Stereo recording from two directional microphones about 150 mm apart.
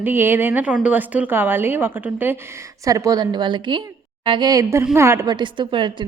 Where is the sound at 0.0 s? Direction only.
15° right (ahead or behind).